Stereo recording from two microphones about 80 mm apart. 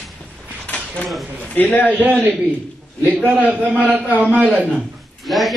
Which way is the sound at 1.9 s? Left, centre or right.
Right.